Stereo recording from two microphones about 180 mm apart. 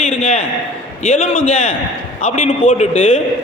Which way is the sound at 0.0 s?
35° left (ahead or behind).